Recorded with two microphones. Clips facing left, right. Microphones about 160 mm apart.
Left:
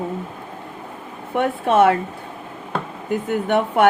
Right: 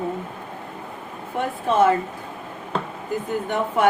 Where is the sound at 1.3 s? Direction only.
70° left (ahead or behind).